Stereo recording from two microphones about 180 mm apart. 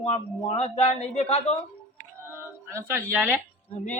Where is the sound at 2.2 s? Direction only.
15° right (ahead or behind).